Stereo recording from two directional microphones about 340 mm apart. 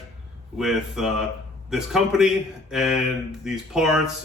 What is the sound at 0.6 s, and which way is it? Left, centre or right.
A man's voice, centre.